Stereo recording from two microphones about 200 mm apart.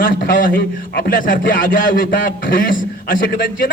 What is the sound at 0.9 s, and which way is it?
A man's voice, 45° left (ahead or behind).